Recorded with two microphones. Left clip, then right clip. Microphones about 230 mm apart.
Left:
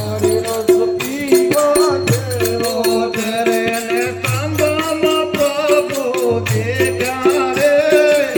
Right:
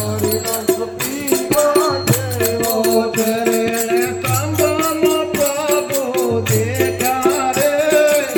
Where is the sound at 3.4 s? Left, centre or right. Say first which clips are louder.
Left 1 dB; left.